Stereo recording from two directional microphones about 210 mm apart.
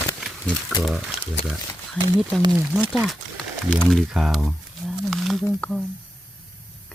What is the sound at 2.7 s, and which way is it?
Speech, centre (ahead or behind).